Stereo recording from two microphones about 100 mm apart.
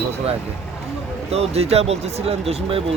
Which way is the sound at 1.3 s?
90° right.